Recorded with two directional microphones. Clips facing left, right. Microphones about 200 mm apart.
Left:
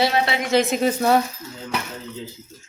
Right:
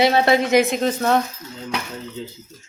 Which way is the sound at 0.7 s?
5° left (ahead or behind).